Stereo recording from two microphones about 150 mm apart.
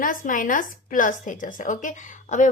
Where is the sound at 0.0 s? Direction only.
65° left (ahead or behind).